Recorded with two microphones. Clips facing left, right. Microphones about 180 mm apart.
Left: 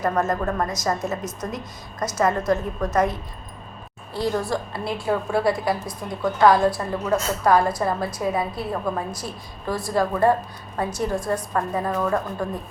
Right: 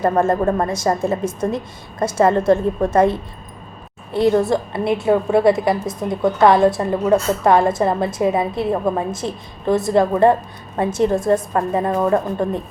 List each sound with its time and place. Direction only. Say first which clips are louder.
0.0 s a woman's voice: right 6 dB; 30° right (ahead or behind)
4.4 s a woman's voice: right 8 dB; 20° right (ahead or behind)